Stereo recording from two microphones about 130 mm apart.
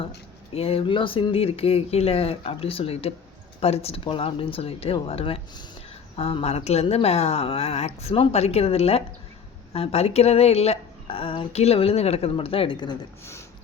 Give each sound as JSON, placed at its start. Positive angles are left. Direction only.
{"t": 0.5, "sound": "speech", "side_deg": 45}